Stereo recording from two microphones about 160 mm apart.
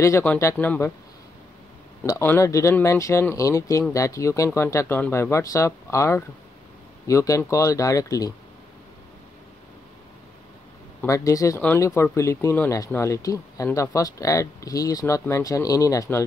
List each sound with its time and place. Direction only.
0.0 s speech: 15° left (ahead or behind)
2.0 s speech: 15° left (ahead or behind)
11.0 s speech: 20° left (ahead or behind)